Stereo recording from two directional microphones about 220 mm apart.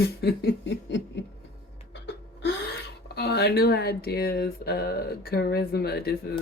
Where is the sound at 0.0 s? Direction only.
50° left (ahead or behind).